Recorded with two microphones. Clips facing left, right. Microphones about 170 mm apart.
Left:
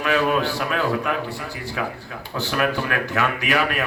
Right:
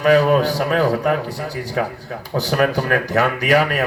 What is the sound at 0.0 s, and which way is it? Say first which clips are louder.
A man's voice: right 7 dB; 40° right (ahead or behind).